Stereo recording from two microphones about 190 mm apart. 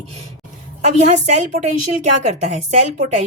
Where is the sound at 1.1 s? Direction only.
40° right (ahead or behind).